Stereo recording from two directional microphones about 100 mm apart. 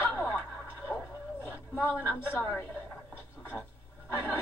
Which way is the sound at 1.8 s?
25° left (ahead or behind).